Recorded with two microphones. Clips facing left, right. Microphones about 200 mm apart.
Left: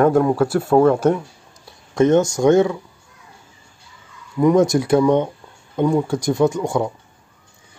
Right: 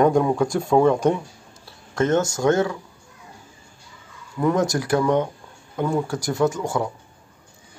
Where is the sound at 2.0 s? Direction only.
20° left (ahead or behind).